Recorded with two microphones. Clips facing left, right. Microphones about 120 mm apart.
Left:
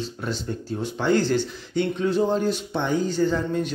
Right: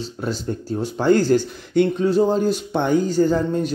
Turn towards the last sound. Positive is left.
turn(degrees=-40)  # may be behind; listen again after turning